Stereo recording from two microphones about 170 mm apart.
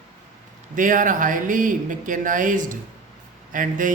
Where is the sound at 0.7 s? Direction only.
50° right (ahead or behind).